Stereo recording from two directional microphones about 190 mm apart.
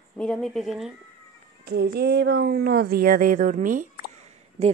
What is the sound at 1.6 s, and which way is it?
Speech, 55° right (ahead or behind).